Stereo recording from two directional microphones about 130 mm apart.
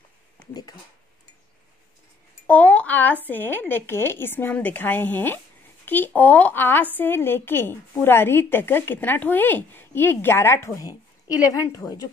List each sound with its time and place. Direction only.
0.5 s speech: 30° left (ahead or behind)
2.4 s a child's voice: 10° left (ahead or behind); by 12.1 s 30° left (ahead or behind)